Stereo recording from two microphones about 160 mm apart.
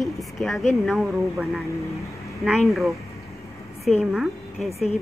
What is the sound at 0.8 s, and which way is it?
Speech, centre (ahead or behind).